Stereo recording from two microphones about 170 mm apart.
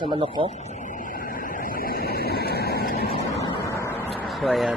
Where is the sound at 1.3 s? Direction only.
55° left (ahead or behind).